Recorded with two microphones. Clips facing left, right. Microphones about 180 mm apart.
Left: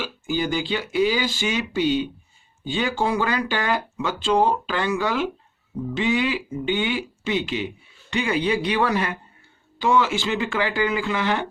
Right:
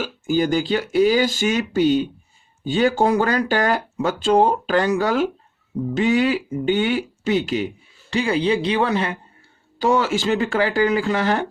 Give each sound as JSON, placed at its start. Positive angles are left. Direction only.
{"t": 0.0, "sound": "speech", "side_deg": -45}
{"t": 9.7, "sound": "speech", "side_deg": -40}